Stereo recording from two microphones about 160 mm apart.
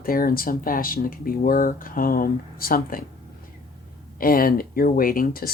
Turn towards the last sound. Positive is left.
turn(degrees=65)  # may be behind; listen again after turning